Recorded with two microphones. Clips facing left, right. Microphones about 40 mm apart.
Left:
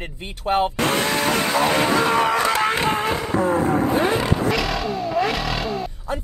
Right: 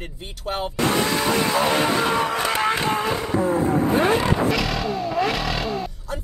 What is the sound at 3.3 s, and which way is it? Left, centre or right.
Vehicle, left.